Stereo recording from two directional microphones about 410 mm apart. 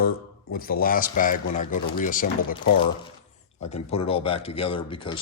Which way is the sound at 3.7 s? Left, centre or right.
Centre.